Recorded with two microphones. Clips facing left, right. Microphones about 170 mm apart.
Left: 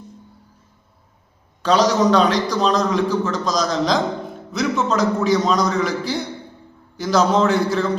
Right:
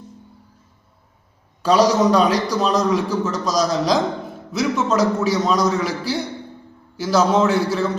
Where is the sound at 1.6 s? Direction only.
10° right (ahead or behind).